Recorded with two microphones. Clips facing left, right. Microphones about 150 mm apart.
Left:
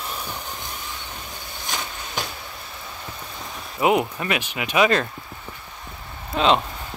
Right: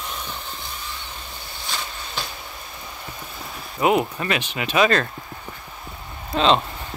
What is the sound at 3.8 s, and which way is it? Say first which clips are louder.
Speech: even; 15° left (ahead or behind).